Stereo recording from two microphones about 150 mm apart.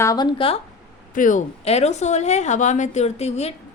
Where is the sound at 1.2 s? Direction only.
60° left (ahead or behind).